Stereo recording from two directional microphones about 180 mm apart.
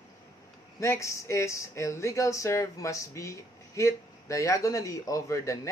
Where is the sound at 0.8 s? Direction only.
15° left (ahead or behind).